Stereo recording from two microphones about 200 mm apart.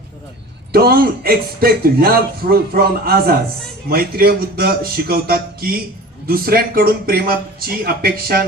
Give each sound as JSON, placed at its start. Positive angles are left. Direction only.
{"t": 0.7, "sound": "speech", "side_deg": -50}